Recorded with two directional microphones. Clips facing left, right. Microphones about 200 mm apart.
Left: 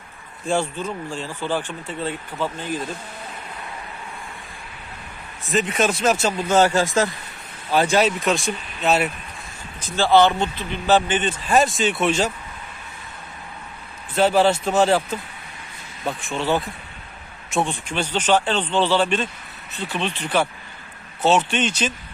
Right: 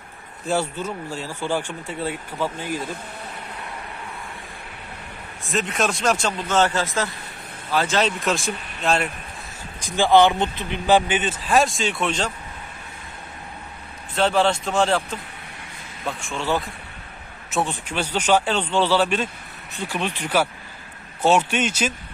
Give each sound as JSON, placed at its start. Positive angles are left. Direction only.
{"t": 0.5, "sound": "speech", "side_deg": -10}
{"t": 5.5, "sound": "speech", "side_deg": 0}
{"t": 6.8, "sound": "speech", "side_deg": 45}
{"t": 7.7, "sound": "speech", "side_deg": 15}
{"t": 8.2, "sound": "speech", "side_deg": 0}
{"t": 9.8, "sound": "speech", "side_deg": -15}
{"t": 14.1, "sound": "speech", "side_deg": 5}
{"t": 16.3, "sound": "speech", "side_deg": 0}